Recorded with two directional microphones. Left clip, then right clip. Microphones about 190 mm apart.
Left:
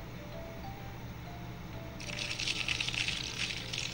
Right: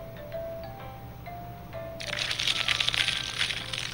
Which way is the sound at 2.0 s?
50° right (ahead or behind).